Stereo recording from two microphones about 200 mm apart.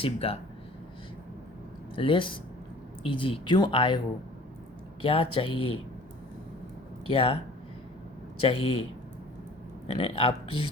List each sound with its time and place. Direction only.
0.0 s speech: 30° left (ahead or behind)
2.0 s speech: 25° left (ahead or behind)
5.0 s speech: 25° left (ahead or behind)
7.1 s speech: 30° left (ahead or behind)
8.4 s speech: 30° left (ahead or behind)
9.9 s speech: 25° left (ahead or behind)